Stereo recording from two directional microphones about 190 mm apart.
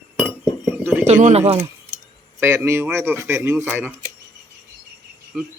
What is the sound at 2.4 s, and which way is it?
Speech, 15° right (ahead or behind).